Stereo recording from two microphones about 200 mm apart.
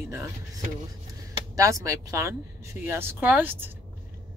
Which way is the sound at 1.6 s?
15° right (ahead or behind).